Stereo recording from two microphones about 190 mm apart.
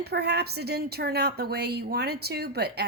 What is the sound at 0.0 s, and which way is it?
A woman's voice, 60° right (ahead or behind).